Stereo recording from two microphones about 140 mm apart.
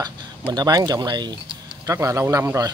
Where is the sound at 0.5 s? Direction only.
30° right (ahead or behind).